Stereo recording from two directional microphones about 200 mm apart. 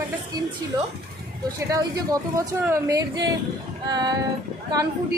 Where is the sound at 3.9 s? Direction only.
20° right (ahead or behind).